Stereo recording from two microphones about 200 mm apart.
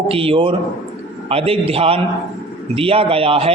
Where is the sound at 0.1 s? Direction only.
30° right (ahead or behind).